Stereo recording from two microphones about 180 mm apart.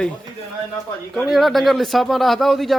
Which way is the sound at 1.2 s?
Centre (ahead or behind).